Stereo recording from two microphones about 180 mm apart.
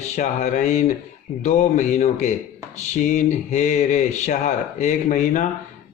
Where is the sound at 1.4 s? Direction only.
40° left (ahead or behind).